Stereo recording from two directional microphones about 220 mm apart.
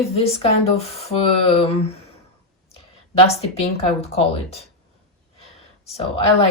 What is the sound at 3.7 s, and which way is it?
Speech, 30° left (ahead or behind).